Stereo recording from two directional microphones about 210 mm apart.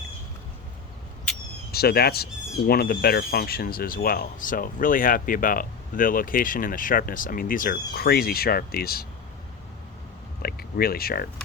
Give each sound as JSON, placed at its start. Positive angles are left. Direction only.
{"t": 1.7, "sound": "speech", "side_deg": 45}
{"t": 10.4, "sound": "speech", "side_deg": 45}